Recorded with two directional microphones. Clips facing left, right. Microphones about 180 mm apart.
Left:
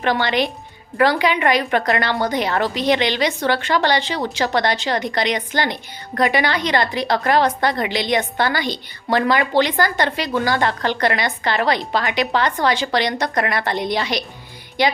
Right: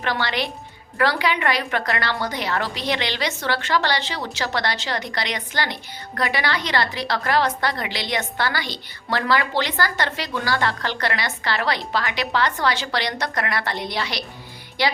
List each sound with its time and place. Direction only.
0.0 s a woman's voice: 20° left (ahead or behind)